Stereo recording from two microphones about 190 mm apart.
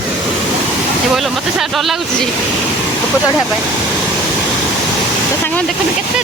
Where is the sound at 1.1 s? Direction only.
Centre (ahead or behind).